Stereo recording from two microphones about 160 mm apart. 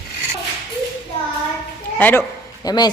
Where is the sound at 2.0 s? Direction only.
10° left (ahead or behind).